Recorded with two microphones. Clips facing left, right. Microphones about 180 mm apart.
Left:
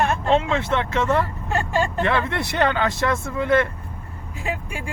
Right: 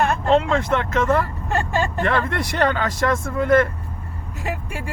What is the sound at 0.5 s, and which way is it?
Speech, 45° right (ahead or behind).